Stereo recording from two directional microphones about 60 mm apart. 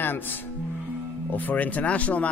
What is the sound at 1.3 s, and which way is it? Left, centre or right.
Speech, left.